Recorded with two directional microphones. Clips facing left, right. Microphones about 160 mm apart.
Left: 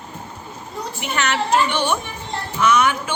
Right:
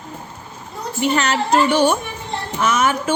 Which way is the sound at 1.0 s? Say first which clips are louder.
Right 5 dB; 35° right (ahead or behind).